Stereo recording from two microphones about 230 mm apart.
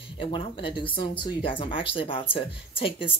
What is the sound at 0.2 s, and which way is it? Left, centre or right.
Speech, left.